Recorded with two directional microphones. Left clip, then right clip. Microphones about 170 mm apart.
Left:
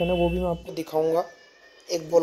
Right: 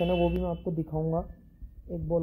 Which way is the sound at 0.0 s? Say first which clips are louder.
Left 4 dB; 35° left (ahead or behind).